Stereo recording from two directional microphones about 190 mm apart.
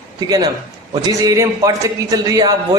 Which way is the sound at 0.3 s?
20° right (ahead or behind).